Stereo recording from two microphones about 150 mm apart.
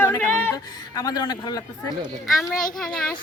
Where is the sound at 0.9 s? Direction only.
25° left (ahead or behind).